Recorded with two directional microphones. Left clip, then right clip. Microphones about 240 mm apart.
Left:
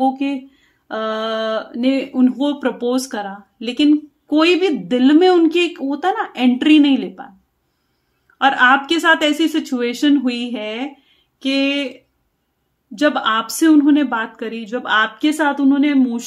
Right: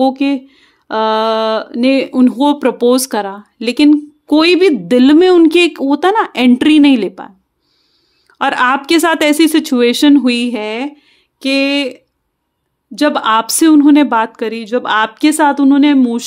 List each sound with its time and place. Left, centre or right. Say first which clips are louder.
0.0 s speech: right 5 dB; right
8.4 s speech: even; right